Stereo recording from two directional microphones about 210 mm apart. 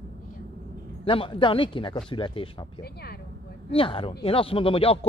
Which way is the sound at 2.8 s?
50° left (ahead or behind).